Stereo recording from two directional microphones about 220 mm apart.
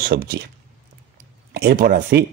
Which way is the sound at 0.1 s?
45° right (ahead or behind).